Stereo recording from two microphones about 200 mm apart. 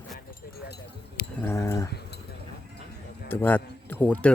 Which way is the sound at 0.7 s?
55° left (ahead or behind).